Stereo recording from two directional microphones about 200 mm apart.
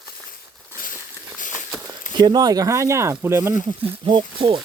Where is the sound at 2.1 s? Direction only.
20° right (ahead or behind).